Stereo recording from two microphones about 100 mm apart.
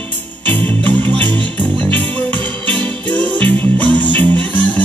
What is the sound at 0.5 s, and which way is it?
Music, 15° left (ahead or behind).